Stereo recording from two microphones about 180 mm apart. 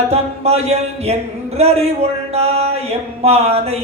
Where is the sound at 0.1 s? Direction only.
35° right (ahead or behind).